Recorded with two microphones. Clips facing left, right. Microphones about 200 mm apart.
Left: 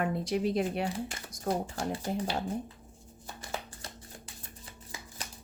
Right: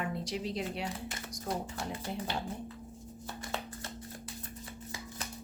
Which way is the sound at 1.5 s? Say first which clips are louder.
Left 5 dB; 30° left (ahead or behind).